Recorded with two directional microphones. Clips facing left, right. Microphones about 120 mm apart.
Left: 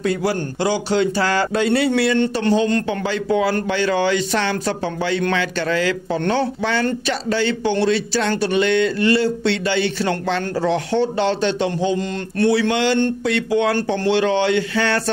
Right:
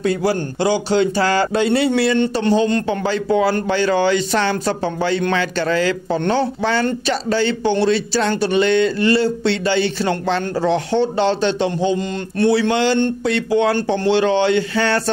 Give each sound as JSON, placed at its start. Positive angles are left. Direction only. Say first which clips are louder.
{"t": 0.0, "sound": "a man's voice", "louder": "right 2 dB", "side_deg": -25}